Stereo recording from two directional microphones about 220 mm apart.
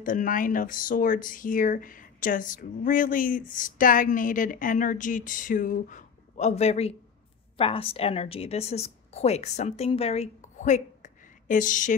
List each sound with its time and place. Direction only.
0.0 s speech: 40° left (ahead or behind)